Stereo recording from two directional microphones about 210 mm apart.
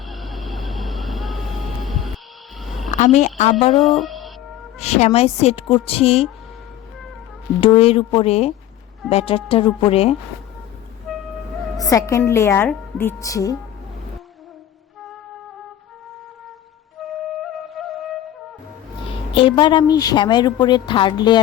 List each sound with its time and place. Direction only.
0.0 s vehicle: centre (ahead or behind)
2.6 s a sound: centre (ahead or behind)
2.9 s a woman's voice: 35° left (ahead or behind)
3.8 s speech: centre (ahead or behind)
4.8 s a woman's voice: 30° left (ahead or behind)
7.6 s a woman's voice: 25° left (ahead or behind)
11.1 s music: centre (ahead or behind)
11.8 s a woman's voice: 15° left (ahead or behind)
17.0 s flute: centre (ahead or behind)
19.3 s a woman's voice: 25° left (ahead or behind)